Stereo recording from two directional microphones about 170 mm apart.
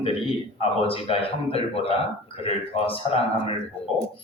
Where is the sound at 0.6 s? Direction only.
35° left (ahead or behind).